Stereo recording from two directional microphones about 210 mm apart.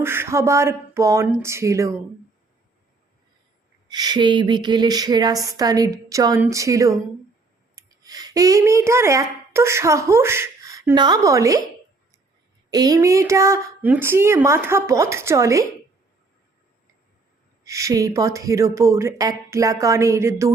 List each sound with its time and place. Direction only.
0.0 s a woman's voice: 10° right (ahead or behind)
3.8 s speech: 20° right (ahead or behind)
12.7 s a woman's voice: 15° right (ahead or behind)
17.6 s a woman's voice: 15° right (ahead or behind)